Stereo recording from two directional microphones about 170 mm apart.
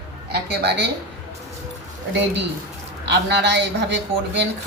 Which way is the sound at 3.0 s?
90° right.